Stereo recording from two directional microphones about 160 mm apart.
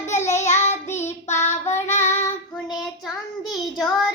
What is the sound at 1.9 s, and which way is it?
Child singing, 45° left (ahead or behind).